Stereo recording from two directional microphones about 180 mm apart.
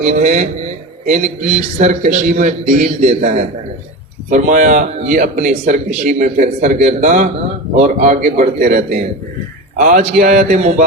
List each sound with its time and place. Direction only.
0.0 s a man's voice: 40° right (ahead or behind)